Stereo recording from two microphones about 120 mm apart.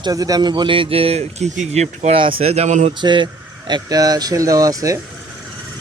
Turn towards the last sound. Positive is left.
turn(degrees=-30)  # may be behind; listen again after turning